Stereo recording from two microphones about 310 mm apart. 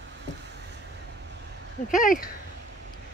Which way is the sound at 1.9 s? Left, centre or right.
Left.